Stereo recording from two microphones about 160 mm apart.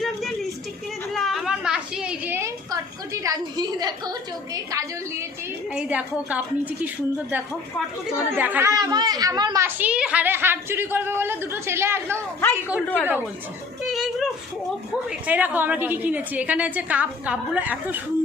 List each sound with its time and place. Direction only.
1.1 s a sound: centre (ahead or behind); by 5.2 s 20° right (ahead or behind)
5.7 s a woman's voice: 10° right (ahead or behind)
9.6 s a woman's voice: 10° right (ahead or behind)
12.4 s speech: 15° left (ahead or behind)
13.8 s a sound: centre (ahead or behind)
15.1 s a woman's voice: 10° right (ahead or behind)